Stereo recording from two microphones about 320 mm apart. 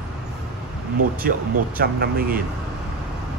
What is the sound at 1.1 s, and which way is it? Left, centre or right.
A man's voice, right.